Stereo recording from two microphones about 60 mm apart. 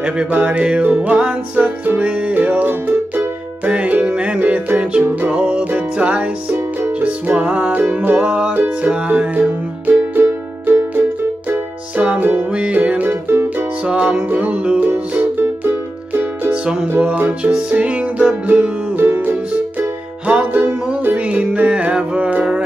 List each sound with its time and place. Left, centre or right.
0.0 s music: centre
10.2 s music: right
12.0 s music: right
13.3 s music: right
13.8 s music: centre
15.3 s music: right
16.9 s music: right